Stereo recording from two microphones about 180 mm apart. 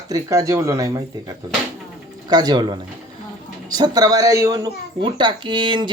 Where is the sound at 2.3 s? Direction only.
20° right (ahead or behind).